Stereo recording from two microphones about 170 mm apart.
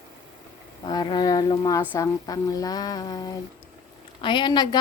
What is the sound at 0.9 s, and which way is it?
A woman's voice, 25° left (ahead or behind).